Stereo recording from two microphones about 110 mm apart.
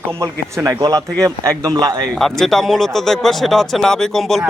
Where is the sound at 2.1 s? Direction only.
Centre (ahead or behind).